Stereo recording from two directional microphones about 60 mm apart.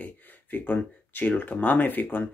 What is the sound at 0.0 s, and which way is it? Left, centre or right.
Speech, left.